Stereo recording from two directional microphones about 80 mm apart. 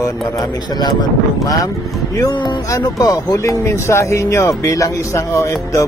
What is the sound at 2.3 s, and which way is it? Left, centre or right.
Speech, left.